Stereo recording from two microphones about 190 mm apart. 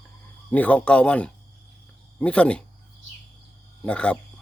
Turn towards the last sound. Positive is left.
turn(degrees=5)  # may be behind; listen again after turning